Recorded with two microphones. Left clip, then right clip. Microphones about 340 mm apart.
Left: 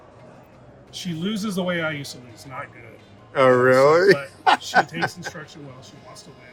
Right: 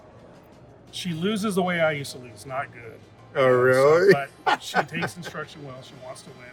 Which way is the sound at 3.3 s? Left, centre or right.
Left.